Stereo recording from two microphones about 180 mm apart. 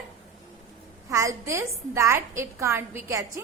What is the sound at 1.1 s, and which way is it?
A woman's voice, 15° right (ahead or behind).